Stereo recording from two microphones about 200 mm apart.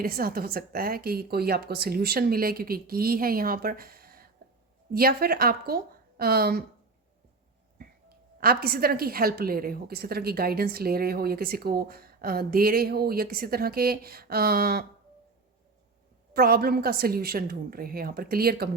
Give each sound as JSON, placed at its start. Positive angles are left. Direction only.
{"t": 0.0, "sound": "a woman's voice", "side_deg": -50}
{"t": 8.4, "sound": "a woman's voice", "side_deg": -50}
{"t": 16.3, "sound": "a woman's voice", "side_deg": -50}